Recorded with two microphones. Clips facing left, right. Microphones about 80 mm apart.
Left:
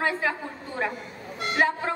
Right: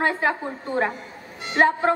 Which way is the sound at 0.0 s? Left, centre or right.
Right.